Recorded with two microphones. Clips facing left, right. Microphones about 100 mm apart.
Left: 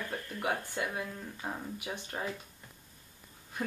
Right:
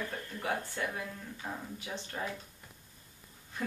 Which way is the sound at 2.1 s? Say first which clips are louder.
Left 1 dB; 35° left (ahead or behind).